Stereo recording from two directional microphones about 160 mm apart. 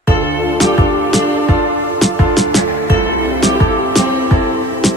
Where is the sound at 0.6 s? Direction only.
Centre (ahead or behind).